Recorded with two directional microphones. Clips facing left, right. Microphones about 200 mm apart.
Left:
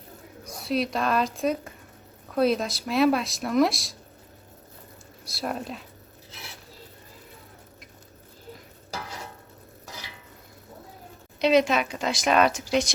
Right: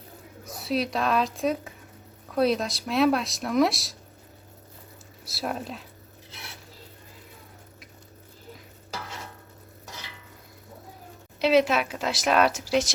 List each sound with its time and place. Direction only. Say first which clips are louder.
0.4 s speech: left 1 dB; centre (ahead or behind)
5.2 s speech: even; centre (ahead or behind)
11.3 s speech: even; 5° right (ahead or behind)